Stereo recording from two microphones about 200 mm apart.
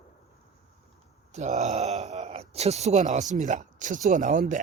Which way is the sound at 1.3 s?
35° right (ahead or behind).